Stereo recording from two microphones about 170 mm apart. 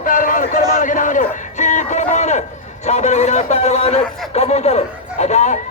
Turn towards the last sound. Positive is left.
turn(degrees=45)  # may be behind; listen again after turning